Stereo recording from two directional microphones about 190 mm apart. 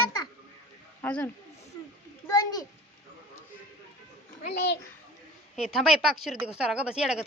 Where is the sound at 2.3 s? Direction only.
20° left (ahead or behind).